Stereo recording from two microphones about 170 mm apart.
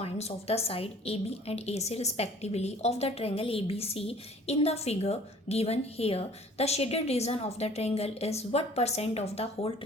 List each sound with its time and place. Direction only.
0.0 s a woman's voice: 35° left (ahead or behind)